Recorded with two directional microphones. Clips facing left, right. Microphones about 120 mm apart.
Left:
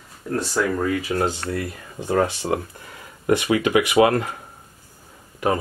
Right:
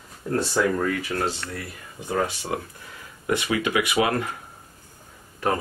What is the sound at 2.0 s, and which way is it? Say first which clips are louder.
Speech: left 5 dB; 40° left (ahead or behind).